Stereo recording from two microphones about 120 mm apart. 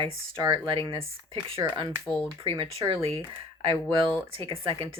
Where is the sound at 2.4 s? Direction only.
40° right (ahead or behind).